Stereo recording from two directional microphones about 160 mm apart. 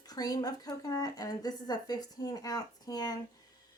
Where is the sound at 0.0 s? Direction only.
25° left (ahead or behind).